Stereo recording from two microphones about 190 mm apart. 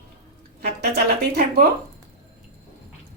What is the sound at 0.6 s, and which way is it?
Speech, 55° right (ahead or behind).